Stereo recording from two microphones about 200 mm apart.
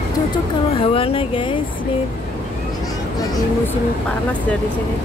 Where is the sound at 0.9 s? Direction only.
25° left (ahead or behind).